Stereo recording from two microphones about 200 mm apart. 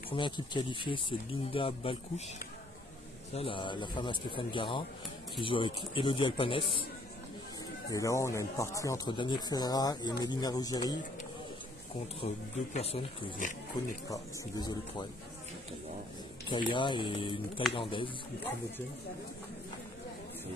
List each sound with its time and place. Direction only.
0.1 s speech: 25° left (ahead or behind)
7.9 s speech: 15° left (ahead or behind)
12.2 s speech: 30° left (ahead or behind)
14.0 s speech: 20° left (ahead or behind)
16.7 s speech: 25° left (ahead or behind)